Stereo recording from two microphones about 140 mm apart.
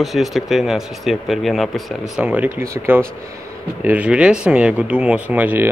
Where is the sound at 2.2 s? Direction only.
10° right (ahead or behind).